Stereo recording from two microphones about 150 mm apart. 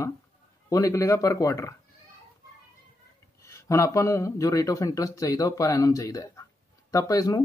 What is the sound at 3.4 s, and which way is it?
Speech, 20° left (ahead or behind).